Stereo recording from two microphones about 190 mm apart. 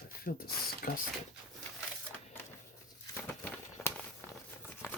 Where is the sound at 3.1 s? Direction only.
10° left (ahead or behind).